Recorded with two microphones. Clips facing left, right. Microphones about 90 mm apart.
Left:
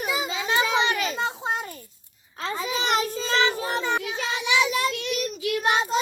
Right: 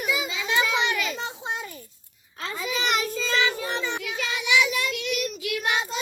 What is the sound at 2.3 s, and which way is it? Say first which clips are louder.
Child singing: left 2 dB; 35° left (ahead or behind).